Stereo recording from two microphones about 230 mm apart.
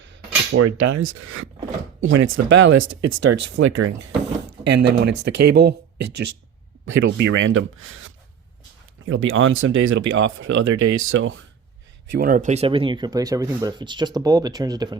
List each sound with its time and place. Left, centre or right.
0.5 s speech: right
12.1 s speech: right; by 14.9 s centre